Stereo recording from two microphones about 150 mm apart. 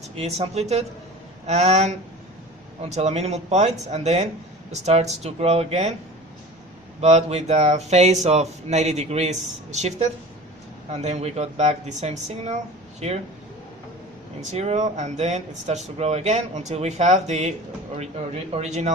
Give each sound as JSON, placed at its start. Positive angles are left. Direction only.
{"t": 0.0, "sound": "speech", "side_deg": -45}
{"t": 7.0, "sound": "speech", "side_deg": -45}
{"t": 14.5, "sound": "speech", "side_deg": -45}
{"t": 18.5, "sound": "speech", "side_deg": -50}